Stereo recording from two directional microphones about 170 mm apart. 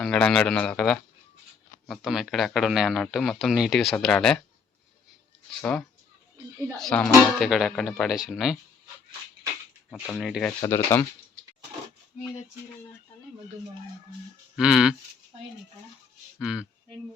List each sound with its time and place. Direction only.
0.0 s speech: 5° left (ahead or behind)
5.5 s speech: 5° left (ahead or behind)
9.9 s speech: centre (ahead or behind)
10.6 s speech: 15° left (ahead or behind)
14.5 s speech: 5° right (ahead or behind)
16.4 s speech: 5° right (ahead or behind)